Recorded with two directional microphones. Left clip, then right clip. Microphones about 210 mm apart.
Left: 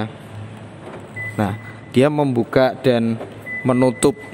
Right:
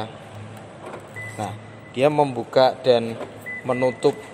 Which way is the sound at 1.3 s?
40° left (ahead or behind).